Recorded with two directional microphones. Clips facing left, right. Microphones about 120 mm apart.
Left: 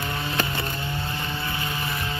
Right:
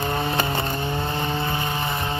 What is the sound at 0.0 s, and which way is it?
Vehicle, 50° right (ahead or behind).